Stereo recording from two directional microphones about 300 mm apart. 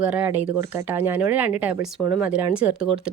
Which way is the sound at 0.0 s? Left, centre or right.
Centre.